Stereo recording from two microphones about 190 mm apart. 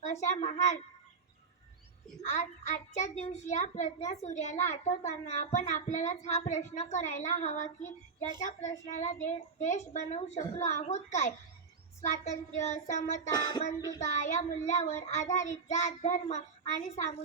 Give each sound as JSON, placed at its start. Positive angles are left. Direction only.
{"t": 0.0, "sound": "a woman's voice", "side_deg": 40}
{"t": 2.3, "sound": "a child's voice", "side_deg": 40}
{"t": 8.9, "sound": "a child's voice", "side_deg": 40}
{"t": 13.3, "sound": "a sound", "side_deg": 20}
{"t": 14.0, "sound": "a child's voice", "side_deg": 40}